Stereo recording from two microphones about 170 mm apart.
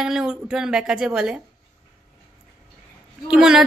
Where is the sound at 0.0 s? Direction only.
5° right (ahead or behind).